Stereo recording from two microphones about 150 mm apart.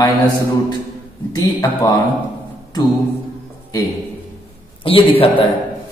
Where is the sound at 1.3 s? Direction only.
25° left (ahead or behind).